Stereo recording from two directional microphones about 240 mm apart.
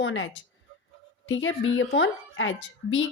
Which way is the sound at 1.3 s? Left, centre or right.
Left.